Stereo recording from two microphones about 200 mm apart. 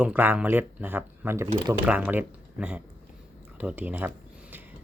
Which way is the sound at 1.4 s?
25° right (ahead or behind).